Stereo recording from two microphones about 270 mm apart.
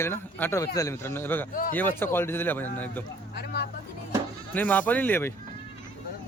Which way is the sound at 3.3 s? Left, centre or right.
Left.